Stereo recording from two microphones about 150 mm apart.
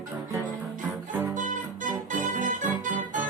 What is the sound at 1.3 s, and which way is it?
Music, 60° right (ahead or behind).